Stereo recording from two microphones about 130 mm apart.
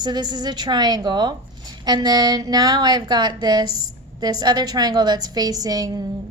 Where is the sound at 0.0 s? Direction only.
35° right (ahead or behind).